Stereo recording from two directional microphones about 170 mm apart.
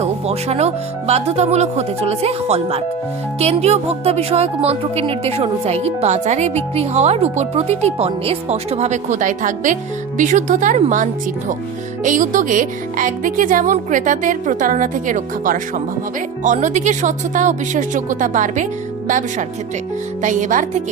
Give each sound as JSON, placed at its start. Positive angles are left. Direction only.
{"t": 0.0, "sound": "speech", "side_deg": -40}